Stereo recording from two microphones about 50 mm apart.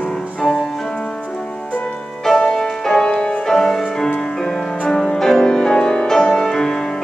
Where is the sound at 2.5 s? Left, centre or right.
Centre.